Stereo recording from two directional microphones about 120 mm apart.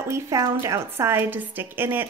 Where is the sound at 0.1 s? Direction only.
25° right (ahead or behind).